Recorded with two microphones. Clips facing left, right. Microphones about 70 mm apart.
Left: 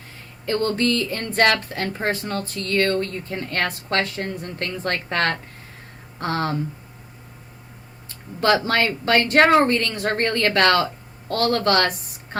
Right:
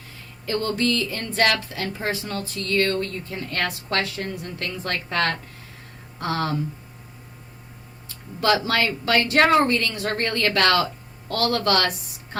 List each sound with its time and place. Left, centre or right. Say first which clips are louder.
0.4 s speech: left 2 dB; left
8.0 s speech: left 2 dB; left